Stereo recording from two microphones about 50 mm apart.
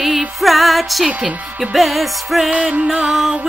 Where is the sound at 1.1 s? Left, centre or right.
Right.